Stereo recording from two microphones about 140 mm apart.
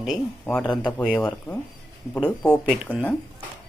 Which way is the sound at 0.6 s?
30° left (ahead or behind).